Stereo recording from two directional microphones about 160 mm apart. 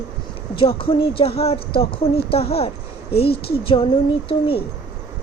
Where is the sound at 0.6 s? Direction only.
35° left (ahead or behind).